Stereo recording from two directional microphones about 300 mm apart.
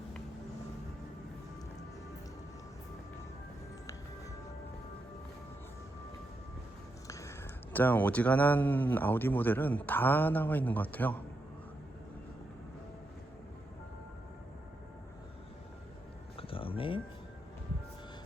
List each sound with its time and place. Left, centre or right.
7.1 s speech: centre
16.4 s music: centre